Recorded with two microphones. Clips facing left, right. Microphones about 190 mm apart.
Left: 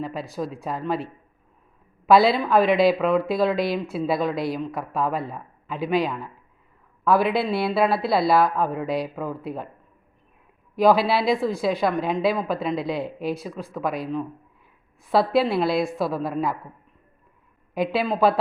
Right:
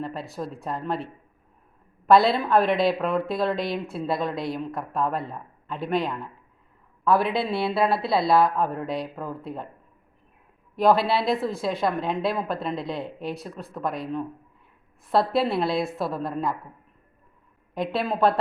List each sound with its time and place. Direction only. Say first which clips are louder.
0.0 s speech: left 3 dB; centre (ahead or behind)
10.8 s speech: left 2 dB; centre (ahead or behind)
17.7 s speech: left 3 dB; centre (ahead or behind)